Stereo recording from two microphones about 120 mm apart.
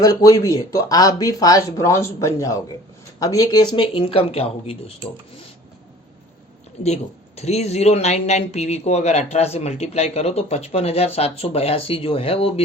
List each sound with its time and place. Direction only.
0.0 s speech: 30° left (ahead or behind); by 4.8 s 55° left (ahead or behind)
6.8 s speech: 65° left (ahead or behind)